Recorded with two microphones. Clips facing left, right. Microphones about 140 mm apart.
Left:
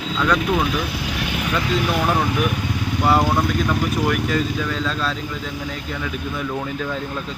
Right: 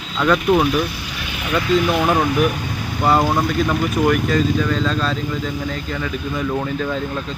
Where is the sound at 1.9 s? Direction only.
15° right (ahead or behind).